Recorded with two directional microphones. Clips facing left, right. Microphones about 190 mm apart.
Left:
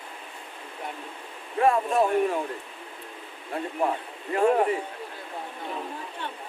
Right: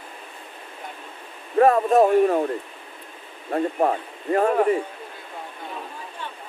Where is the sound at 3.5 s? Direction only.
50° right (ahead or behind).